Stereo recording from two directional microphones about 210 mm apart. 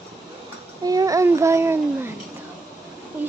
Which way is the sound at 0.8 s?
15° right (ahead or behind).